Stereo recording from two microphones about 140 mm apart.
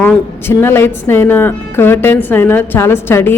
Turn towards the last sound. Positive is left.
turn(degrees=15)  # may be behind; listen again after turning